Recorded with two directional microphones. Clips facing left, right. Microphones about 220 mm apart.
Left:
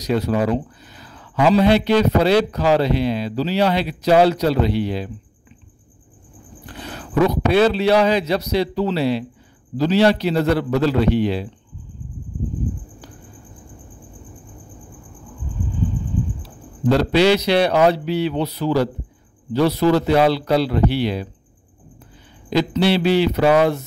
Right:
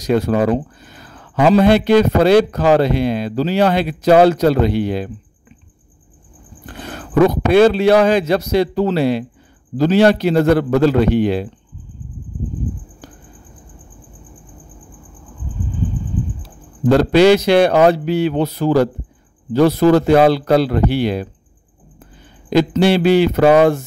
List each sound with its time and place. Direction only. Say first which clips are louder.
0.0 s speech: right 4 dB; 50° right (ahead or behind)
6.6 s a man's voice: right 3 dB; 50° right (ahead or behind)
16.4 s speech: right 5 dB; 50° right (ahead or behind)
22.5 s speech: right 4 dB; 50° right (ahead or behind)